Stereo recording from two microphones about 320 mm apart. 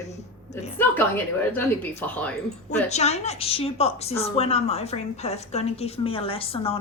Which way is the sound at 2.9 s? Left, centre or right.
Centre.